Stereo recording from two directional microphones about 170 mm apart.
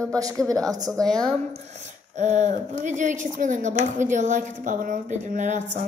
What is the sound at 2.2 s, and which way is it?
Speech, 45° right (ahead or behind).